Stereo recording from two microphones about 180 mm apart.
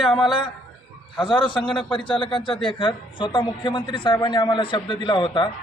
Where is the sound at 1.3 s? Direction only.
25° left (ahead or behind).